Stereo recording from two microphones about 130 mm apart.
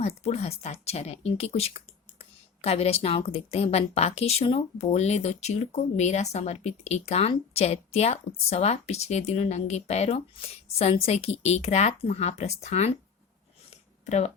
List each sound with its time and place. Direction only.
0.0 s a woman's voice: 55° left (ahead or behind)
14.0 s speech: 60° left (ahead or behind)